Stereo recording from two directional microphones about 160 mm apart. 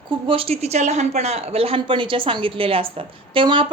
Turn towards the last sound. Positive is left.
turn(degrees=-30)  # may be behind; listen again after turning